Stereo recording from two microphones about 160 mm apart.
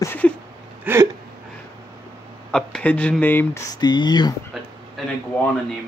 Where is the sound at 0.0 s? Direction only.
15° left (ahead or behind).